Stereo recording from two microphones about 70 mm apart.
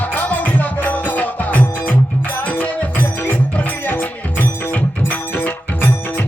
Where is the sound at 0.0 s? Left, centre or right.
Left.